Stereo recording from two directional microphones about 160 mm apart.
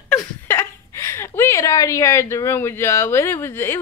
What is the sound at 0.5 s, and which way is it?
Speech, 15° left (ahead or behind).